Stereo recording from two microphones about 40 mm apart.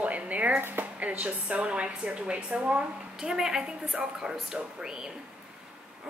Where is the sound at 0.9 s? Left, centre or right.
Right.